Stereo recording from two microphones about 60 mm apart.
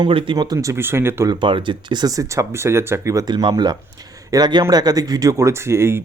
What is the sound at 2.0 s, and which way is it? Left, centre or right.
Speech, right.